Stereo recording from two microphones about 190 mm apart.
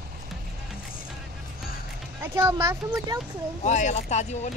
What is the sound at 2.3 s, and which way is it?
Speech, 15° right (ahead or behind).